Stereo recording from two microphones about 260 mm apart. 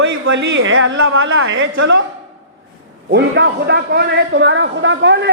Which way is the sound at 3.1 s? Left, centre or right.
Right.